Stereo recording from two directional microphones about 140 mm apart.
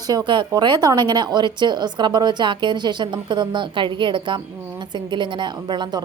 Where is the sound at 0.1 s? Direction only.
30° right (ahead or behind).